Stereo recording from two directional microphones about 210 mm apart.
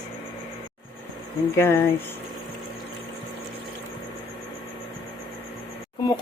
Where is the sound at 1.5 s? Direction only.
10° left (ahead or behind).